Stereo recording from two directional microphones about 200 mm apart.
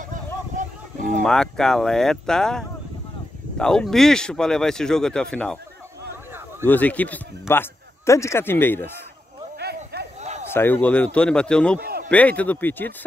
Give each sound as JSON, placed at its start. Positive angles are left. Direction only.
{"t": 1.0, "sound": "speech", "side_deg": 5}
{"t": 6.6, "sound": "a man's voice", "side_deg": 10}
{"t": 9.6, "sound": "snake", "side_deg": -55}
{"t": 10.5, "sound": "speech", "side_deg": 10}
{"t": 11.8, "sound": "a sound", "side_deg": -50}
{"t": 12.1, "sound": "a man's voice", "side_deg": 5}